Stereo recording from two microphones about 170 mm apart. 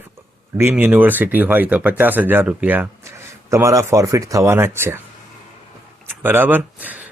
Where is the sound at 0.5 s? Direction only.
10° right (ahead or behind).